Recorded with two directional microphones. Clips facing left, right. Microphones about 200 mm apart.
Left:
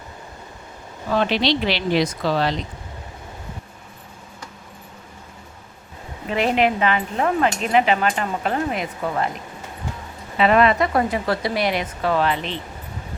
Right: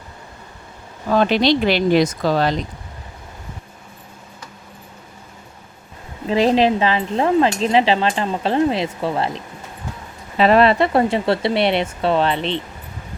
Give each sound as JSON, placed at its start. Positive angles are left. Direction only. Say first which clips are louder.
{"t": 1.1, "sound": "speech", "louder": "right 4 dB", "side_deg": -45}
{"t": 6.2, "sound": "speech", "louder": "right 4 dB", "side_deg": -30}